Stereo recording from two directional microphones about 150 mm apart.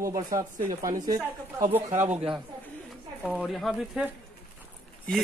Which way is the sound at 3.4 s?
Centre (ahead or behind).